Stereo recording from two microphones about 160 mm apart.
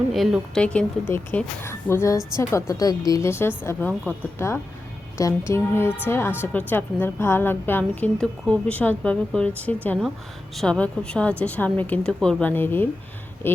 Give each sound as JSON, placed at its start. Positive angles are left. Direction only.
{"t": 0.1, "sound": "a woman's voice", "side_deg": -5}